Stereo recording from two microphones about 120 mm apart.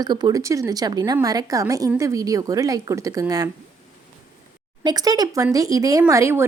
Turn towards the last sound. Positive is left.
turn(degrees=-25)  # may be behind; listen again after turning